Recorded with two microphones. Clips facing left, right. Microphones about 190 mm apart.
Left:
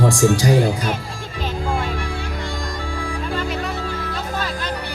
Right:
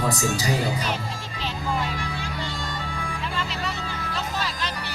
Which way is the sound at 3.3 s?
45° left (ahead or behind).